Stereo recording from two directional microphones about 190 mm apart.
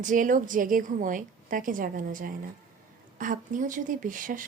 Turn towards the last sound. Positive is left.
turn(degrees=-45)  # may be behind; listen again after turning